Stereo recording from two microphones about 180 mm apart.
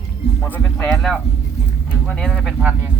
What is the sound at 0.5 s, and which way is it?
Speech, 10° left (ahead or behind).